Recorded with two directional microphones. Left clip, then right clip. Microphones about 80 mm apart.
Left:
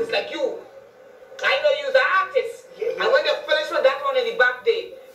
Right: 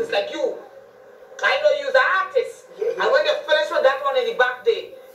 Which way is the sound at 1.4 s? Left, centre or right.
Right.